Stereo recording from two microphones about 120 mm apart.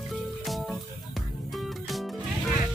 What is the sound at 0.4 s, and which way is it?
Music, centre (ahead or behind).